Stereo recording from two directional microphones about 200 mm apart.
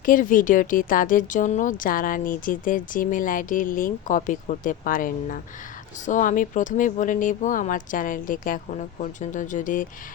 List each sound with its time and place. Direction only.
0.0 s speech: 40° left (ahead or behind)